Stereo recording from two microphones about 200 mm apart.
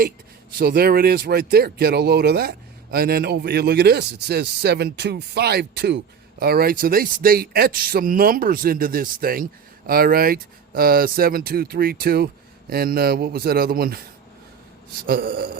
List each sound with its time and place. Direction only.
0.6 s speech: 50° right (ahead or behind)
15.0 s speech: 50° right (ahead or behind)